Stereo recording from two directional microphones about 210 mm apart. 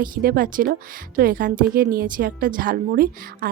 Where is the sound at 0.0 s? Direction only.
45° right (ahead or behind).